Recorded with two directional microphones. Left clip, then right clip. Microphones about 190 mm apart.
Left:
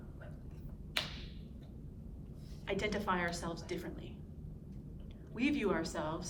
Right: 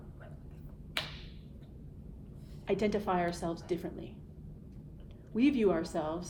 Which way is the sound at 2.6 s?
45° right (ahead or behind).